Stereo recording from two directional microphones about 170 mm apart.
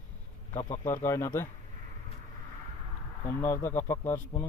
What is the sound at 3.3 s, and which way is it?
Speech, 15° left (ahead or behind).